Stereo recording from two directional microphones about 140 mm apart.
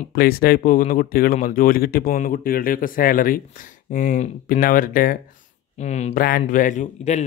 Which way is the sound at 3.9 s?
75° left (ahead or behind).